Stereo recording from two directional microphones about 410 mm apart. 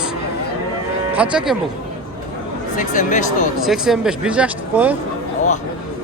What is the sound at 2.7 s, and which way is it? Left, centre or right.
Speech, centre.